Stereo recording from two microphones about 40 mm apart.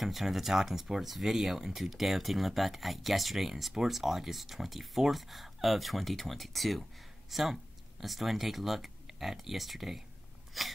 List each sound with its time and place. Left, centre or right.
0.0 s speech: centre